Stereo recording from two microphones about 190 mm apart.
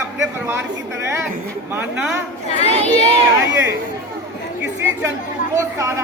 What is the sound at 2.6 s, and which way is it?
Speech, 35° left (ahead or behind).